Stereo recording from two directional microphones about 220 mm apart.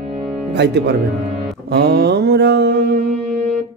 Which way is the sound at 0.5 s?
50° right (ahead or behind).